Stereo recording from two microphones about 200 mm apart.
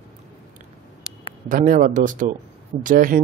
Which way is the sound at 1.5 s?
40° right (ahead or behind).